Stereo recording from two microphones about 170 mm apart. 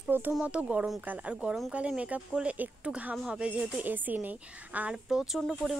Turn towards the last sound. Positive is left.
turn(degrees=0)  # may be behind; listen again after turning